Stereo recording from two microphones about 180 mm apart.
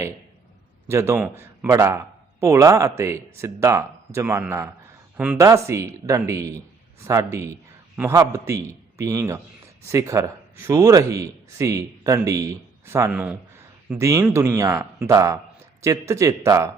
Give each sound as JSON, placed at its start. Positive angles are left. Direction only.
{"t": 0.9, "sound": "a man's voice", "side_deg": -15}